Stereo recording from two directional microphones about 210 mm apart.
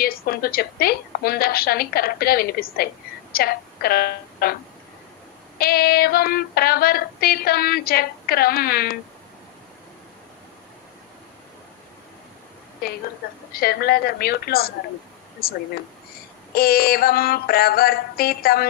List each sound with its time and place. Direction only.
0.0 s a woman's voice: 45° left (ahead or behind)
5.6 s a woman's voice: 45° left (ahead or behind)
13.5 s a woman's voice: 45° left (ahead or behind)